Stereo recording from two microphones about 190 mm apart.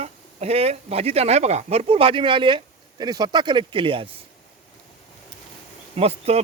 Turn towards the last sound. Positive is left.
turn(degrees=-30)  # may be behind; listen again after turning